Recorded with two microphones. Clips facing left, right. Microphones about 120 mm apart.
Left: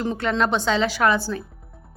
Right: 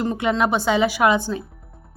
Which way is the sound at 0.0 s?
10° right (ahead or behind).